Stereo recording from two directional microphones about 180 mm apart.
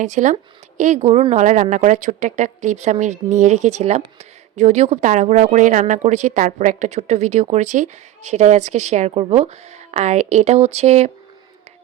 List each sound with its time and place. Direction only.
0.0 s a woman's voice: 45° right (ahead or behind)